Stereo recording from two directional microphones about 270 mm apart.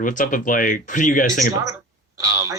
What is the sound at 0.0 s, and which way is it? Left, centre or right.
Speech, left.